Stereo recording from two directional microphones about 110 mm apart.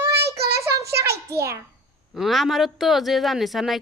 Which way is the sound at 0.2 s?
25° right (ahead or behind).